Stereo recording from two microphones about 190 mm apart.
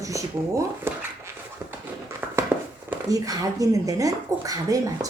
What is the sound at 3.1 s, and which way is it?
Speech, 20° right (ahead or behind).